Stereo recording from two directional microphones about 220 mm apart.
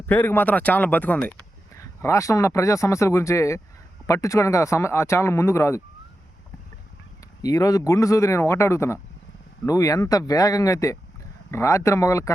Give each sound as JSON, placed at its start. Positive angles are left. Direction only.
{"t": 0.0, "sound": "speech", "side_deg": 10}
{"t": 7.4, "sound": "speech", "side_deg": 15}